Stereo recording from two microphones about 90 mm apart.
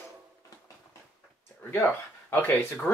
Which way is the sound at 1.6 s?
25° left (ahead or behind).